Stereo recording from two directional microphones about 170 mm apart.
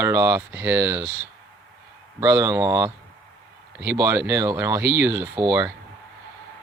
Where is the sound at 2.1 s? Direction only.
15° right (ahead or behind).